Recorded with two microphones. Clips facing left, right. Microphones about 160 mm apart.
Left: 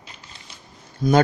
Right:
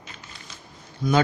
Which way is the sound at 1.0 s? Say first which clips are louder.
Left 4 dB; 40° left (ahead or behind).